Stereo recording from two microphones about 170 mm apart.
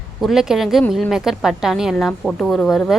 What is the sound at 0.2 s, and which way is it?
A woman's voice, centre (ahead or behind).